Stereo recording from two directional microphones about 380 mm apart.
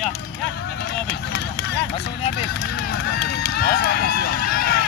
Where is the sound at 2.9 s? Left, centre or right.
Left.